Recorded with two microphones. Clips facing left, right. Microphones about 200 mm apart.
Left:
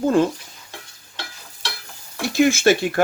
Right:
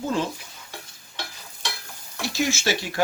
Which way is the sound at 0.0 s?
55° left (ahead or behind).